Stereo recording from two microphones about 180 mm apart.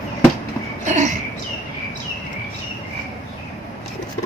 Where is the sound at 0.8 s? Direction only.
40° right (ahead or behind).